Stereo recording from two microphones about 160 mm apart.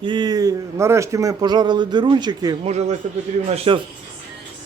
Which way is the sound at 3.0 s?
45° right (ahead or behind).